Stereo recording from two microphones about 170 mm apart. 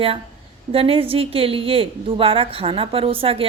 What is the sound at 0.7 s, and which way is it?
A woman's voice, 35° right (ahead or behind).